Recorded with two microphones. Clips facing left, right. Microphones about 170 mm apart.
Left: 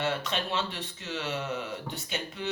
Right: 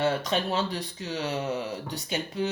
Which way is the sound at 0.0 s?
40° right (ahead or behind).